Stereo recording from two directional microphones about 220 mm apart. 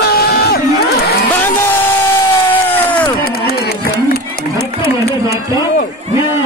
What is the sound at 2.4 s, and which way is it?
Crowd, 10° left (ahead or behind).